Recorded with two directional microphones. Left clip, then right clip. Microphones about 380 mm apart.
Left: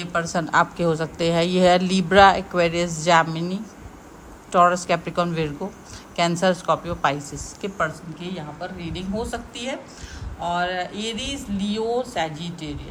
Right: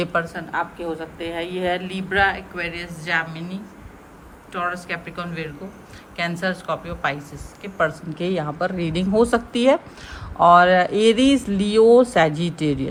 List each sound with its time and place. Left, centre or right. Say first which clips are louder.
0.0 s a woman's voice: right 3 dB; centre
0.3 s a woman's voice: left 6 dB; centre
8.2 s speech: right 10 dB; centre